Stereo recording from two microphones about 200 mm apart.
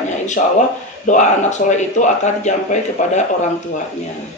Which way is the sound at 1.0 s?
35° left (ahead or behind).